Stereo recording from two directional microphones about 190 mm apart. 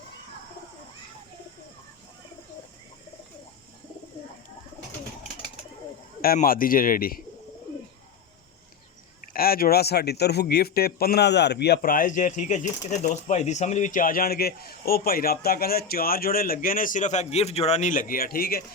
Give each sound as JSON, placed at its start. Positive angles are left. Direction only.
{"t": 6.2, "sound": "speech", "side_deg": 50}
{"t": 9.3, "sound": "speech", "side_deg": 50}